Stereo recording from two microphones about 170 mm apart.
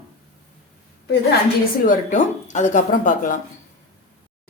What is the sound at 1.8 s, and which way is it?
A woman's voice, 45° left (ahead or behind).